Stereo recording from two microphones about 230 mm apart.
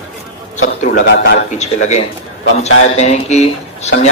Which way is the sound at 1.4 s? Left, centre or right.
Left.